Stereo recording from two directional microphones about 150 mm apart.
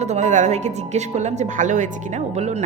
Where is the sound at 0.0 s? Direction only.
50° right (ahead or behind).